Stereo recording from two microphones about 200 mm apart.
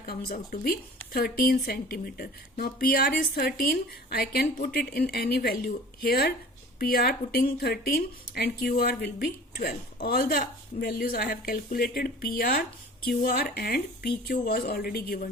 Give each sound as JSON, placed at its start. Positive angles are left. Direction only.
{"t": 0.0, "sound": "a woman's voice", "side_deg": 50}